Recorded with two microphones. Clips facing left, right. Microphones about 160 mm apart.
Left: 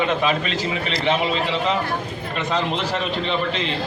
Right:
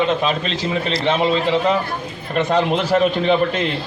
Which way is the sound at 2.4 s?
50° right (ahead or behind).